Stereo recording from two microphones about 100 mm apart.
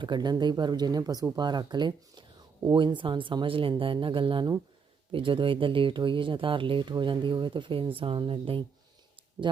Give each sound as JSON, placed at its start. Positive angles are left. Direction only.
{"t": 0.0, "sound": "speech", "side_deg": -45}